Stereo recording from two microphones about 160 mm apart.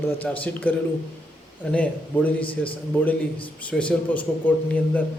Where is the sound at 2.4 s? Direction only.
35° left (ahead or behind).